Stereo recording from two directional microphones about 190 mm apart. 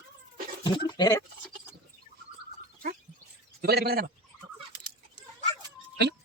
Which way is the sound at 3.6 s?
55° right (ahead or behind).